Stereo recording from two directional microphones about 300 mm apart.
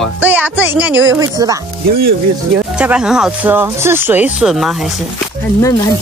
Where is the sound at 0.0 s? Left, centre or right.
Centre.